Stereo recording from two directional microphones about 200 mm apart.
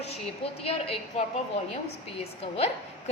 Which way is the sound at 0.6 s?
30° left (ahead or behind).